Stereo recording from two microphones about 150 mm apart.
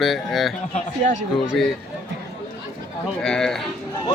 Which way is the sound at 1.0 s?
55° right (ahead or behind).